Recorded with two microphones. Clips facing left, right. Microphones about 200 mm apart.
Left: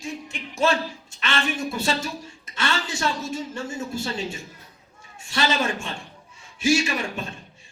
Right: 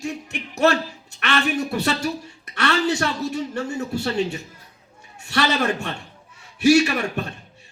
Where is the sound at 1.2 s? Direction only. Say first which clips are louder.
Right 4 dB; 65° right (ahead or behind).